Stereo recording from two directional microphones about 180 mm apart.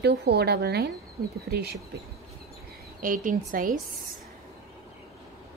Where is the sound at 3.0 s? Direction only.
50° right (ahead or behind).